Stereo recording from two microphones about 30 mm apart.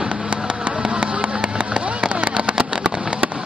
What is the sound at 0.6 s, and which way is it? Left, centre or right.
Vehicle, right.